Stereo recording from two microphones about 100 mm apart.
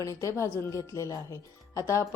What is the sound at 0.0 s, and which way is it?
A woman's voice, 35° left (ahead or behind).